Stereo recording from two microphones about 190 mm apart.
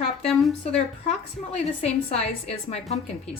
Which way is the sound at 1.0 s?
35° left (ahead or behind).